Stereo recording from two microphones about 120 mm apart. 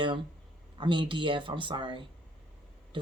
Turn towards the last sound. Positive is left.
turn(degrees=-45)  # may be behind; listen again after turning